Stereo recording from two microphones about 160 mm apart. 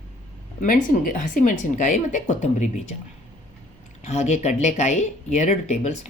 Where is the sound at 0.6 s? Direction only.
60° left (ahead or behind).